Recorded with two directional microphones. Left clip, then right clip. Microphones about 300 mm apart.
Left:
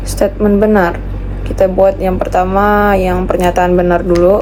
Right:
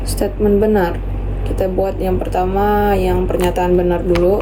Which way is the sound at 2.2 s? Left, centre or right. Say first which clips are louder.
Left 6 dB; centre.